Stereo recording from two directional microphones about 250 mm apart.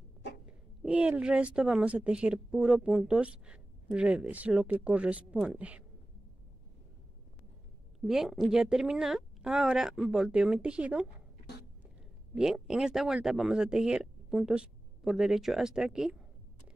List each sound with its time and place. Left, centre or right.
0.5 s a woman's voice: centre
8.1 s a woman's voice: centre
12.4 s a woman's voice: centre